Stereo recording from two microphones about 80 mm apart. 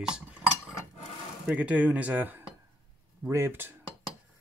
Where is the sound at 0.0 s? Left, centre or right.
Centre.